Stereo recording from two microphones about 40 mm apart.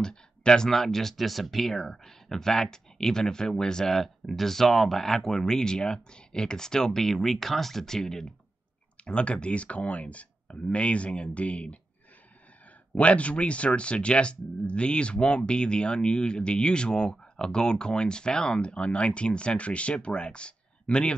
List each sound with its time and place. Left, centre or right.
0.0 s a sound: centre
0.7 s speech: centre
9.0 s speech: left
12.9 s speech: left